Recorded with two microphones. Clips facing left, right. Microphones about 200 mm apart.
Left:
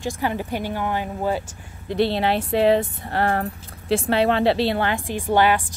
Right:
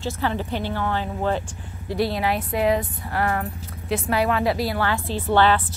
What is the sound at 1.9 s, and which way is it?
A woman's voice, 25° left (ahead or behind).